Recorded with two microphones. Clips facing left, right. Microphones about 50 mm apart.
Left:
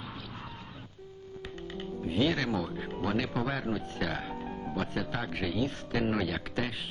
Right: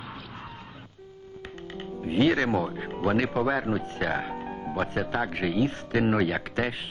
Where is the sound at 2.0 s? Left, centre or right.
Right.